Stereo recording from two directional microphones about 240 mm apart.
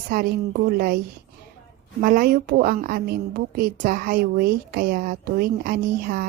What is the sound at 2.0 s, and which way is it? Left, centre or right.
A woman's voice, right.